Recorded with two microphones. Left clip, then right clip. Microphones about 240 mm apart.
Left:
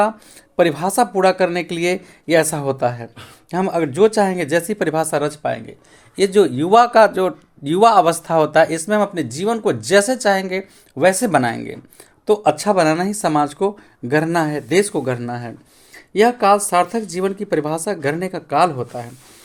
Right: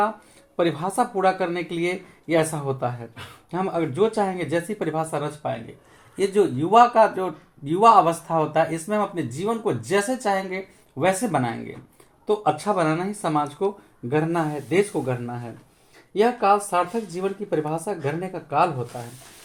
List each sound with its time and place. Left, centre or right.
0.5 s speech: left
6.1 s speech: left